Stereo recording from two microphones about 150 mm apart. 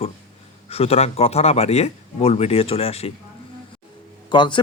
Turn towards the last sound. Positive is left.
turn(degrees=30)  # may be behind; listen again after turning